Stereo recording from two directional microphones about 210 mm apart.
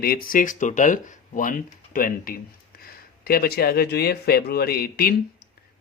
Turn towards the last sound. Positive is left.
turn(degrees=45)  # may be behind; listen again after turning